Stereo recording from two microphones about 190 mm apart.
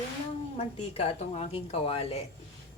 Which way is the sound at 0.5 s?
30° left (ahead or behind).